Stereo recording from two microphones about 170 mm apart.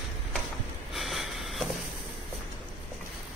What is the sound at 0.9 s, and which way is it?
Snort, centre (ahead or behind).